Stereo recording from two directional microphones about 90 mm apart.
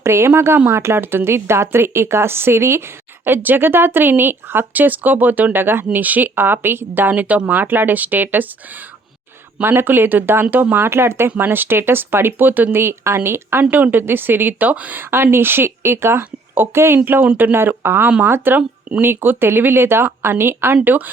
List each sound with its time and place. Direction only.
0.0 s speech: 30° right (ahead or behind)
9.6 s speech: 25° right (ahead or behind)